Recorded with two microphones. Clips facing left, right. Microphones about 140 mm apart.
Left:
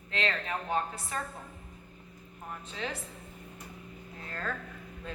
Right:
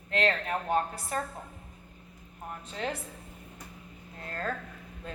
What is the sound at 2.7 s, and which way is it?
Speech, 45° right (ahead or behind).